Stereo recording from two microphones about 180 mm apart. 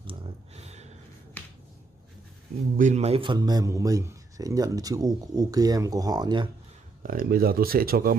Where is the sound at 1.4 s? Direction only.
10° left (ahead or behind).